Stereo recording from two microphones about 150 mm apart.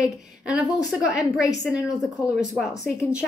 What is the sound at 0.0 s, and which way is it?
A woman's voice, 5° right (ahead or behind).